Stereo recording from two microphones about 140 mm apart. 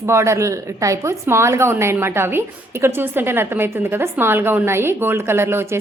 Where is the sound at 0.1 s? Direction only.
20° right (ahead or behind).